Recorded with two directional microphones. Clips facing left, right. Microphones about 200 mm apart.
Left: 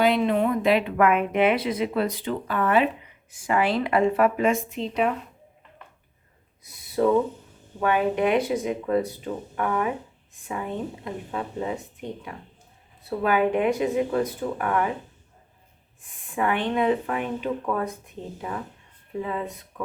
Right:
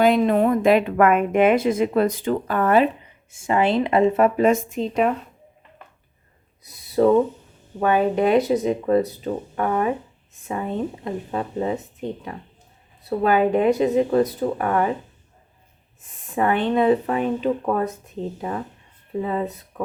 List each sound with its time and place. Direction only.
0.0 s speech: 45° right (ahead or behind)
3.3 s speech: 25° right (ahead or behind)
4.4 s speech: 40° right (ahead or behind)
6.6 s owl: 35° right (ahead or behind)
7.8 s speech: 35° right (ahead or behind)
11.0 s speech: 35° right (ahead or behind)
16.3 s speech: 35° right (ahead or behind)
19.2 s speech: 35° right (ahead or behind)